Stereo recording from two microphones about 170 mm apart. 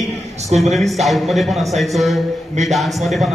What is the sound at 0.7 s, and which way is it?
A man's voice, centre (ahead or behind).